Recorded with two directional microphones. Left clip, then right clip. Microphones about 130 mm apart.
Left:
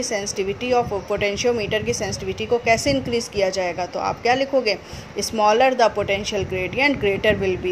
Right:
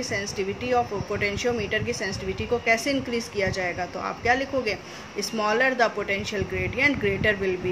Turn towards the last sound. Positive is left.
turn(degrees=45)  # may be behind; listen again after turning